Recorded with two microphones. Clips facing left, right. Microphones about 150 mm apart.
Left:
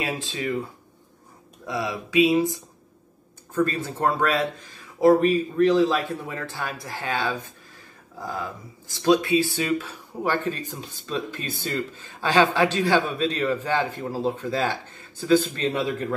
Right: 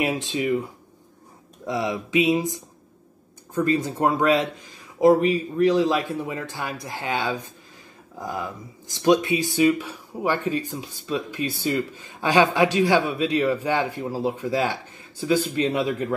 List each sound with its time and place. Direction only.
0.0 s speech: 20° right (ahead or behind)
1.7 s speech: 25° right (ahead or behind)